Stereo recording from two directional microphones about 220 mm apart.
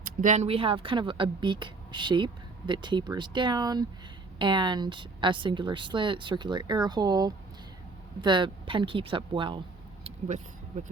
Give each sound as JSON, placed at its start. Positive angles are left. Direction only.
{"t": 0.2, "sound": "speech", "side_deg": -30}
{"t": 10.0, "sound": "vehicle", "side_deg": -30}